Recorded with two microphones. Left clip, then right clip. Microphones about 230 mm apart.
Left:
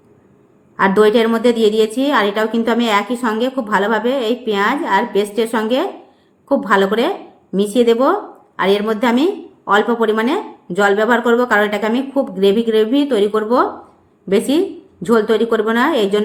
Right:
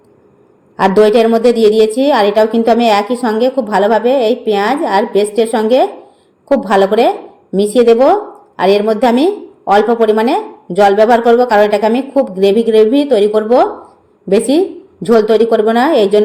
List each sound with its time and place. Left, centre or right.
0.8 s a woman's voice: centre